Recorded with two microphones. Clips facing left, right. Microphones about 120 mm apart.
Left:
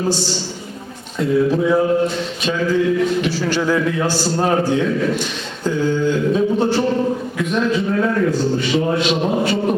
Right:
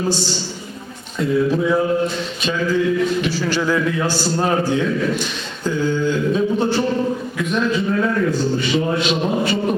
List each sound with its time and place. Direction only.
1.2 s a man's voice: 50° left (ahead or behind)
4.1 s a man's voice: 70° left (ahead or behind)
4.4 s a man's voice: 45° left (ahead or behind)
8.4 s speech: 55° left (ahead or behind)